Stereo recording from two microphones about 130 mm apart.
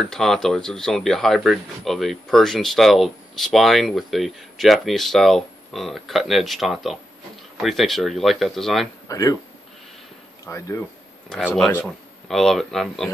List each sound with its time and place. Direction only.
0.0 s speech: 5° left (ahead or behind)
9.1 s speech: 25° left (ahead or behind)
10.4 s speech: 20° left (ahead or behind)
11.3 s speech: 5° left (ahead or behind)